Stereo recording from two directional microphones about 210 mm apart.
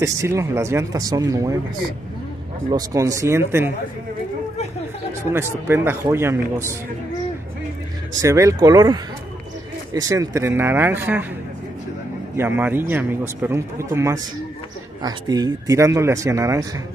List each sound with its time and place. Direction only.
0.0 s a man's voice: 15° right (ahead or behind)
2.7 s a man's voice: 15° right (ahead or behind)
5.3 s a man's voice: 10° right (ahead or behind)
8.1 s a man's voice: 15° right (ahead or behind)
12.4 s a man's voice: 10° right (ahead or behind)